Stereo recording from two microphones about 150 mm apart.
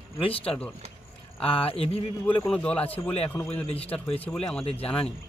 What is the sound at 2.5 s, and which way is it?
Speech, 5° left (ahead or behind).